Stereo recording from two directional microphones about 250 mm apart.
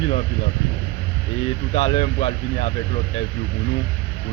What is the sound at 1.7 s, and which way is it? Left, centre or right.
Speech, left.